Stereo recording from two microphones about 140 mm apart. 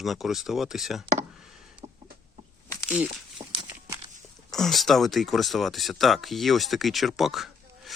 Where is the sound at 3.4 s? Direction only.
35° right (ahead or behind).